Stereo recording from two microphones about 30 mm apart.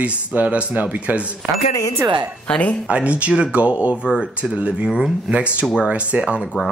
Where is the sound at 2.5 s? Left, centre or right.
Left.